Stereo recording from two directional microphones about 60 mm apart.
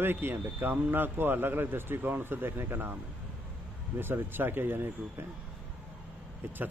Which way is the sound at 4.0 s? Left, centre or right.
Right.